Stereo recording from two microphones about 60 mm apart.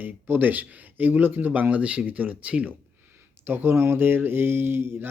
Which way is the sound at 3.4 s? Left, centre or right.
Right.